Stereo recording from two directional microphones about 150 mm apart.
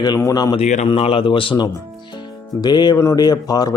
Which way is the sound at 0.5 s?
50° left (ahead or behind).